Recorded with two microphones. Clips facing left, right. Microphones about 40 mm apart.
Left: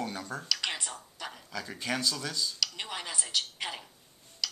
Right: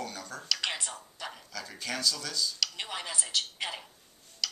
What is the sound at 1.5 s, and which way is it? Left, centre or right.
Speech, centre.